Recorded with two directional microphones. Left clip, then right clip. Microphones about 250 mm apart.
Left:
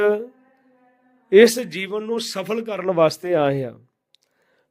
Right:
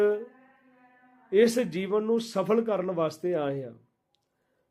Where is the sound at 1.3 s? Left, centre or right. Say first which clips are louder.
Left 9 dB; left.